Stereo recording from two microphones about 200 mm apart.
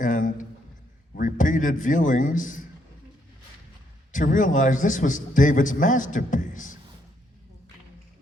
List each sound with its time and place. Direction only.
0.0 s a sound: 40° left (ahead or behind)
1.1 s a man's voice: 40° left (ahead or behind)
4.1 s a man's voice: 40° left (ahead or behind)